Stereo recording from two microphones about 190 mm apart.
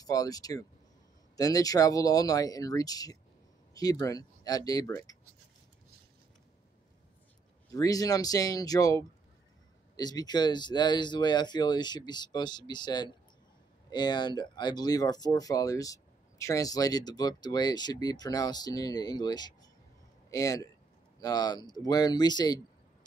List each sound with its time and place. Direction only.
0.0 s speech: 20° left (ahead or behind)
7.7 s a man's voice: 20° left (ahead or behind)